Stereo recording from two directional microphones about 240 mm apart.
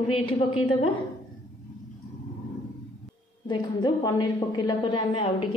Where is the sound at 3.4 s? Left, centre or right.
Centre.